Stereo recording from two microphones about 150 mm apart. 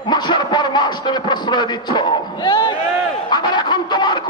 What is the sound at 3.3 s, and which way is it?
Music, 30° left (ahead or behind).